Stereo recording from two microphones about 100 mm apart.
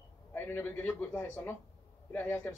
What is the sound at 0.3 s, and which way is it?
A man's voice, 20° left (ahead or behind).